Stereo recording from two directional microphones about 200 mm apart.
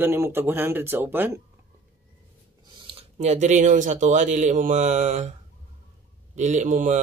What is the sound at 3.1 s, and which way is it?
Speech, 35° right (ahead or behind).